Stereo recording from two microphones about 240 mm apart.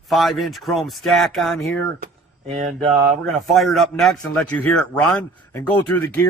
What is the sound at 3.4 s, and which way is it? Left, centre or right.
Speech, centre.